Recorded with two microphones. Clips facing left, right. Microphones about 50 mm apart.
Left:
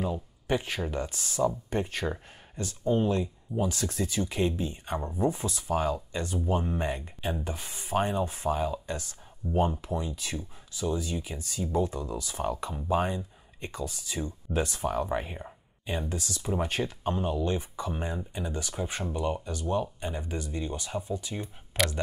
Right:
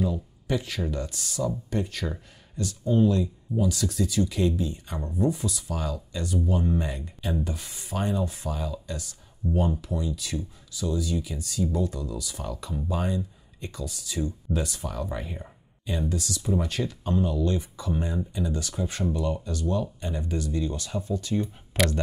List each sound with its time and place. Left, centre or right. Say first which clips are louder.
0.0 s speech: right 3 dB; left
21.7 s speech: right 3 dB; centre